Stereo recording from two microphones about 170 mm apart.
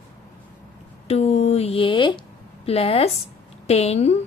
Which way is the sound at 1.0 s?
35° left (ahead or behind).